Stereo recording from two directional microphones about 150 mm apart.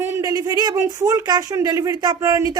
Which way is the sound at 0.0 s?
20° right (ahead or behind).